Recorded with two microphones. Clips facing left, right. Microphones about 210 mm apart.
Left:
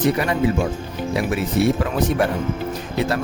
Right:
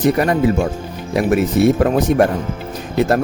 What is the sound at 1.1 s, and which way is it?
Speech, 45° right (ahead or behind).